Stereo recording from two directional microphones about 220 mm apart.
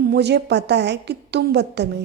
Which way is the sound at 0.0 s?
50° right (ahead or behind).